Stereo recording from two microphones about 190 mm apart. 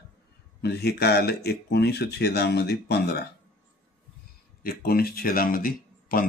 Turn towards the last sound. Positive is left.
turn(degrees=50)  # may be behind; listen again after turning